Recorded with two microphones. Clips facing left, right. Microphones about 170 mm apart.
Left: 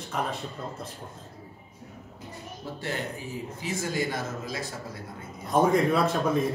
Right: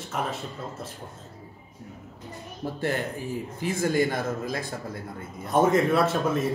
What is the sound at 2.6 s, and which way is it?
A man's voice, 50° right (ahead or behind).